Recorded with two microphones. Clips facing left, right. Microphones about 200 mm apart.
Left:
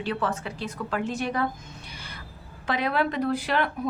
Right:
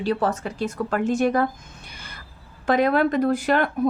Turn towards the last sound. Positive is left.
turn(degrees=-45)  # may be behind; listen again after turning